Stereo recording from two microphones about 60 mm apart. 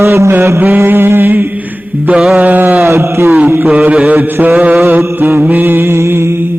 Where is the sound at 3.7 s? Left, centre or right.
Centre.